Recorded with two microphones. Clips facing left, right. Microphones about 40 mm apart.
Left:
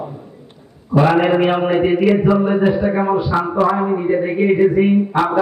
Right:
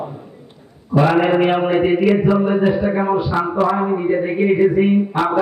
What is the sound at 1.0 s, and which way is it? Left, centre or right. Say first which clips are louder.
Speech: left 1 dB; centre.